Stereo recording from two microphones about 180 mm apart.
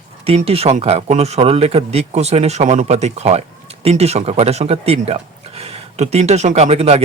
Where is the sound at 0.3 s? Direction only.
35° right (ahead or behind).